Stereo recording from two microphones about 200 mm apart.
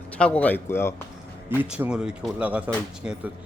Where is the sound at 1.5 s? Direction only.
5° right (ahead or behind).